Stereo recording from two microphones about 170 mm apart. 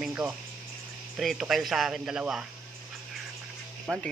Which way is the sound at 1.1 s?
Centre (ahead or behind).